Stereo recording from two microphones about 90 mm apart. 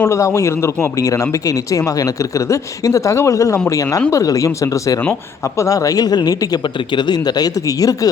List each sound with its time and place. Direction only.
0.0 s speech: 30° left (ahead or behind)
6.6 s speech: 60° left (ahead or behind); by 8.1 s 40° left (ahead or behind)